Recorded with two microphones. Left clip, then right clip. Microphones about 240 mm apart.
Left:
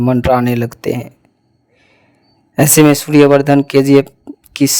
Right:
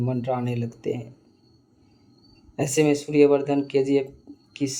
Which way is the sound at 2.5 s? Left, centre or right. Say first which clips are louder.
Left 12 dB; left.